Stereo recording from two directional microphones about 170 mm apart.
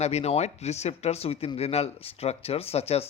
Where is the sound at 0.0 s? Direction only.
40° left (ahead or behind).